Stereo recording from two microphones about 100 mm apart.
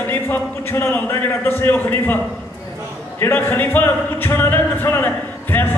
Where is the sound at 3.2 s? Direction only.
20° left (ahead or behind).